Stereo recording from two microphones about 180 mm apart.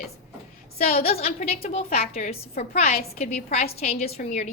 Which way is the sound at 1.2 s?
35° left (ahead or behind).